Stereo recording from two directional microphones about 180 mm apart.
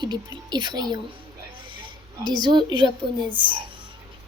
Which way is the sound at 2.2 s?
25° right (ahead or behind).